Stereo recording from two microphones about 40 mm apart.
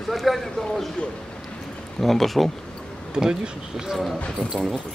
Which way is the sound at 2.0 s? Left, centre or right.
Centre.